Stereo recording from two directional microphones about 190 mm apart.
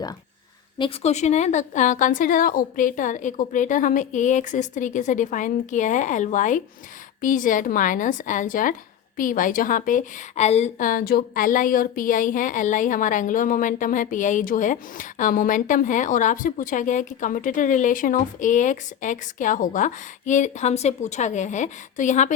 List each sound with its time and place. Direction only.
0.8 s a woman's voice: 30° left (ahead or behind)